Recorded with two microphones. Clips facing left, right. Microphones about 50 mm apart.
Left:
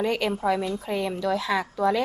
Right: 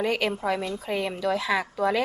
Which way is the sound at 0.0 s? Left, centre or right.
Centre.